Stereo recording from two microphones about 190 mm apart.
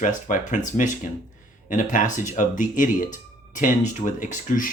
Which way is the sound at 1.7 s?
45° left (ahead or behind).